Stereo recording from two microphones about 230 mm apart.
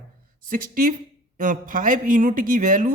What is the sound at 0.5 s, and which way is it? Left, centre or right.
Speech, right.